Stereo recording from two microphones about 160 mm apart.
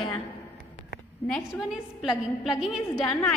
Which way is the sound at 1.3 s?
Centre (ahead or behind).